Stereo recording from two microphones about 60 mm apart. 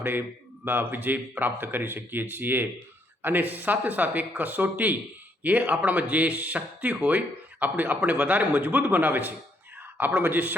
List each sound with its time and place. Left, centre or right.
0.0 s a man's voice: right